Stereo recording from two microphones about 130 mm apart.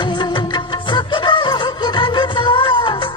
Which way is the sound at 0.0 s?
35° left (ahead or behind).